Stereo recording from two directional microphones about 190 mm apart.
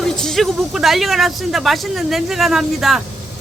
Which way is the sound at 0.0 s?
Centre (ahead or behind).